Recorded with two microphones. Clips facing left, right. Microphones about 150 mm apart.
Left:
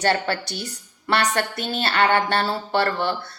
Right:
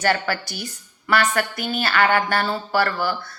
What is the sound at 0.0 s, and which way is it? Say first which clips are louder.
A woman's voice: even; 30° left (ahead or behind).